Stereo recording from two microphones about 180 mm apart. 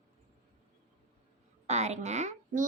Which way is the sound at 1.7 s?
40° right (ahead or behind).